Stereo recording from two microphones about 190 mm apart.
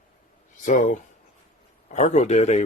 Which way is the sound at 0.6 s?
40° left (ahead or behind).